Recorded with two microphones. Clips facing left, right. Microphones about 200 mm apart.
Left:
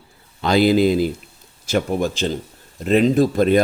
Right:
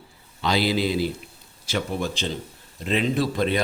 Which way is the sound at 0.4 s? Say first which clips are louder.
Left 8 dB; 50° left (ahead or behind).